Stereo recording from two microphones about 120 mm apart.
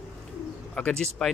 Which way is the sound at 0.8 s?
10° left (ahead or behind).